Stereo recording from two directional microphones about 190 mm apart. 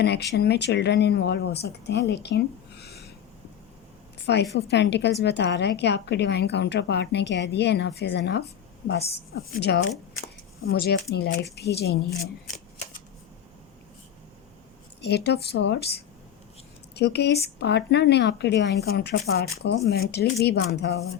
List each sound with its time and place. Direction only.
0.0 s a woman's voice: 60° left (ahead or behind)
4.5 s a woman's voice: 65° left (ahead or behind)
15.0 s a woman's voice: 60° left (ahead or behind)